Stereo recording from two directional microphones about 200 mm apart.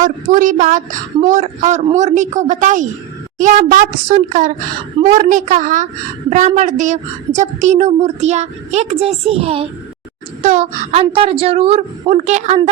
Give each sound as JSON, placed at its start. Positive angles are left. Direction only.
{"t": 0.0, "sound": "speech", "side_deg": -40}